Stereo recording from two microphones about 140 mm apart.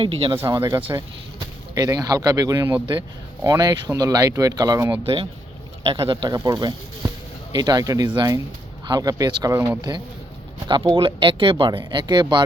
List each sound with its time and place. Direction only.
0.0 s speech: 40° right (ahead or behind)
0.3 s speech: 20° right (ahead or behind)
5.0 s speech: 40° right (ahead or behind)